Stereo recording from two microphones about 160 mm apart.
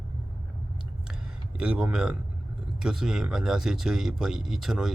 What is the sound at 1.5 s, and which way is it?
Speech, 5° right (ahead or behind).